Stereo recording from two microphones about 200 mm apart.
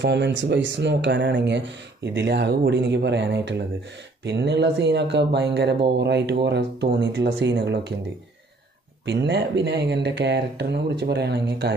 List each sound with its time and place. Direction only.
0.0 s speech: 65° right (ahead or behind)
9.0 s speech: 60° right (ahead or behind)